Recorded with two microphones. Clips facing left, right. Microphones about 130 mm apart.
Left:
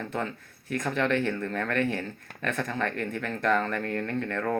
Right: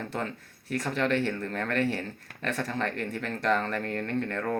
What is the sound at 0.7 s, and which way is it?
A man's voice, 35° right (ahead or behind).